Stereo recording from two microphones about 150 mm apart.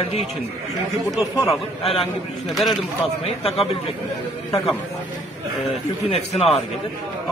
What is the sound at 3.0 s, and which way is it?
Speech, 40° left (ahead or behind).